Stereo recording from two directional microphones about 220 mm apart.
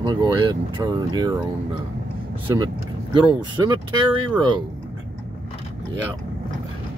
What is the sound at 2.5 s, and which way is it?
Speech, 20° right (ahead or behind).